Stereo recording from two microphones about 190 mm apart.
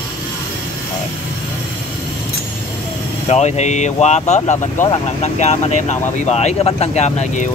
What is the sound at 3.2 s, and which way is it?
Speech, 35° left (ahead or behind).